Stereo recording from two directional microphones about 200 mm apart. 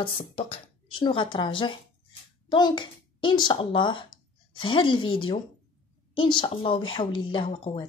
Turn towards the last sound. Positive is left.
turn(degrees=25)  # may be behind; listen again after turning